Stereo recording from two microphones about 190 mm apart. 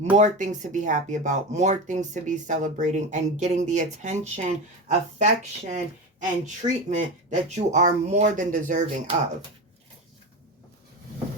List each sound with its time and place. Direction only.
0.2 s speech: 40° right (ahead or behind)